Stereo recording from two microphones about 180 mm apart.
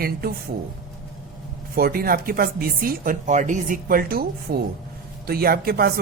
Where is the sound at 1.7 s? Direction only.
55° right (ahead or behind).